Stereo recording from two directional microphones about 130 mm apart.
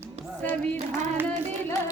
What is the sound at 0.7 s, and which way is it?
Singing, 65° right (ahead or behind).